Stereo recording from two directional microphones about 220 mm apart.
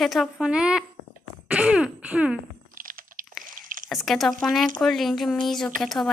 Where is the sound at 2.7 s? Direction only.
40° right (ahead or behind).